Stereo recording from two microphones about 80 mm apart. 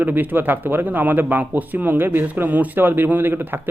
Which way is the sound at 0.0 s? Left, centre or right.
Right.